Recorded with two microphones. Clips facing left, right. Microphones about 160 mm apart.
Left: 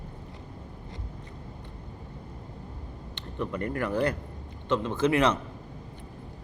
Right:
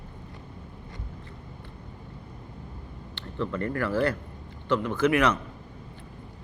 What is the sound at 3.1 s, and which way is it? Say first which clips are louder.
Speech: right 2 dB; 20° left (ahead or behind).